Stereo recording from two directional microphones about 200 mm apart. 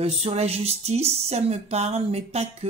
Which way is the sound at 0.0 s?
30° right (ahead or behind).